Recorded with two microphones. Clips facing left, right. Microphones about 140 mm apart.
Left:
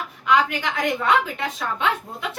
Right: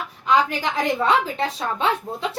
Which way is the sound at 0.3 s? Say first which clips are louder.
Right 1 dB; 30° right (ahead or behind).